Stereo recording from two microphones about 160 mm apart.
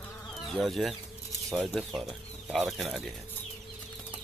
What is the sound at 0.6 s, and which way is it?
Speech, centre (ahead or behind).